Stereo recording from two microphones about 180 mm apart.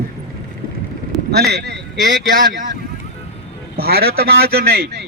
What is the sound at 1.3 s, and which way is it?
Speech, 65° right (ahead or behind).